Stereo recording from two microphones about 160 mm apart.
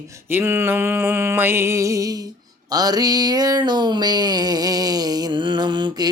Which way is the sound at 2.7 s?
25° right (ahead or behind).